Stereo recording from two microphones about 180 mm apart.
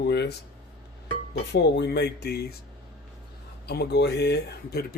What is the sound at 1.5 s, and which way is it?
Speech, 70° left (ahead or behind).